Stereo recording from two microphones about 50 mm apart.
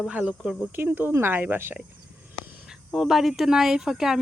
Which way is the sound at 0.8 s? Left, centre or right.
Right.